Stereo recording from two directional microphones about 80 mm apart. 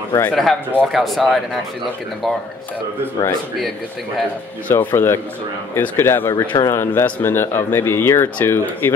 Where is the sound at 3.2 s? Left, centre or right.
Left.